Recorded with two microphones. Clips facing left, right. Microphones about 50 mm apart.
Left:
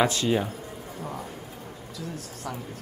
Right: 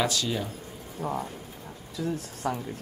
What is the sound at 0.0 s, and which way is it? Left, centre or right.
Speech, left.